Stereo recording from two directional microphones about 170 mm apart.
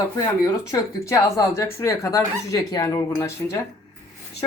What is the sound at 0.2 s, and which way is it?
Speech, 20° left (ahead or behind).